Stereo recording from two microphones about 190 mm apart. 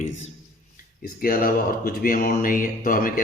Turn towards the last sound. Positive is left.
turn(degrees=45)  # may be behind; listen again after turning